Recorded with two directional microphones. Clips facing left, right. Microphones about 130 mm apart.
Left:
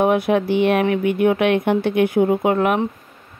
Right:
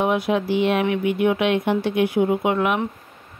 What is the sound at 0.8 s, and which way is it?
Speech, 45° left (ahead or behind).